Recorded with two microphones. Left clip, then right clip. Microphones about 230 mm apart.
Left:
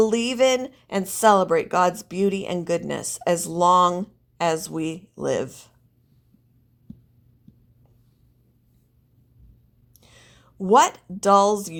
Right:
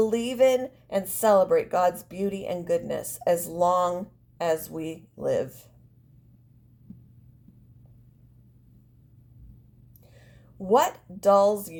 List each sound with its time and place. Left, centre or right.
0.0 s speech: left
10.0 s speech: left